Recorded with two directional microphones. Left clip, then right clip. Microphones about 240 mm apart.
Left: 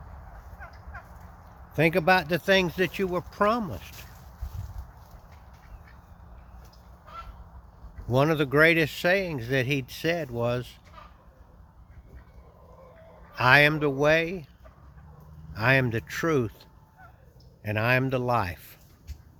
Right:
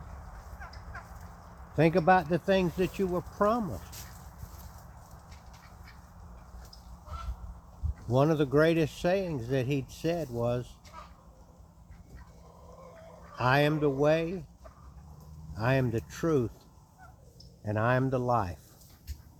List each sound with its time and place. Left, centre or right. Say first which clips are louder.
0.6 s a sound: left 2 dB; left
1.7 s speech: left 2 dB; centre
8.1 s speech: left 3 dB; centre
13.3 s speech: left 7 dB; centre
15.5 s speech: left 6 dB; centre
17.7 s speech: left 3 dB; centre